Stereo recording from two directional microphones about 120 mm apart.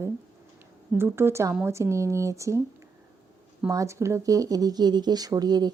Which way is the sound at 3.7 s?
25° right (ahead or behind).